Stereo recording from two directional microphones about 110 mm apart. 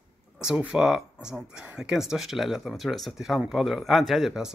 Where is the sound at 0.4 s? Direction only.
5° right (ahead or behind).